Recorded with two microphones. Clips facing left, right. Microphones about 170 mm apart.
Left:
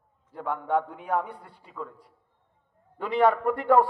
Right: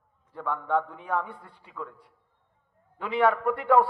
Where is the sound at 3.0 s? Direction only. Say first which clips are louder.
Left 2 dB; 40° left (ahead or behind).